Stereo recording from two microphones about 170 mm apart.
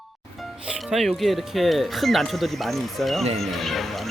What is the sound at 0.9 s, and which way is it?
Speech, centre (ahead or behind).